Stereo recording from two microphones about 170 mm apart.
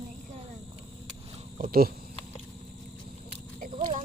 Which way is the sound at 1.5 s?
55° right (ahead or behind).